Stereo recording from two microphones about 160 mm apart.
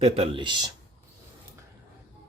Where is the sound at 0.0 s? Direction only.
35° right (ahead or behind).